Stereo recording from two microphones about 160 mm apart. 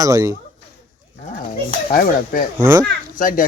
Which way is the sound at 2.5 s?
15° right (ahead or behind).